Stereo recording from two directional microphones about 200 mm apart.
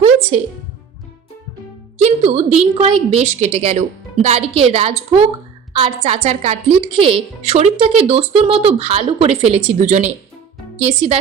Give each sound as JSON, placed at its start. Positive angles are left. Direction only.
{"t": 0.0, "sound": "music", "side_deg": -35}
{"t": 2.0, "sound": "music", "side_deg": -35}
{"t": 2.7, "sound": "a woman's voice", "side_deg": -25}